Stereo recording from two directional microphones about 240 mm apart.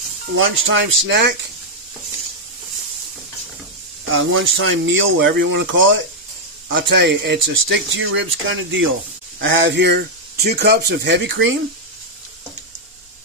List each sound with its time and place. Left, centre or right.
0.4 s speech: right
4.1 s speech: right